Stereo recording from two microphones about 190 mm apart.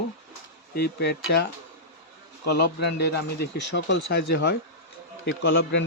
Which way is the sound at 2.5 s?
60° left (ahead or behind).